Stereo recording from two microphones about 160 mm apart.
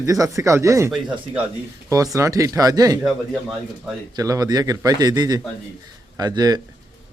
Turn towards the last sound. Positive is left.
turn(degrees=-25)  # may be behind; listen again after turning